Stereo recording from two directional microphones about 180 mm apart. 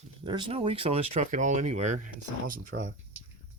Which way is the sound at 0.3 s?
25° right (ahead or behind).